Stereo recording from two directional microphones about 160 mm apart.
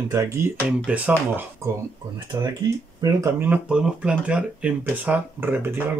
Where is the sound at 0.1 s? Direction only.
20° right (ahead or behind).